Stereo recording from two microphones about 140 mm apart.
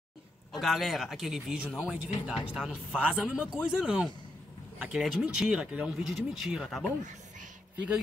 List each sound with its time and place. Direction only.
0.5 s speech: centre (ahead or behind)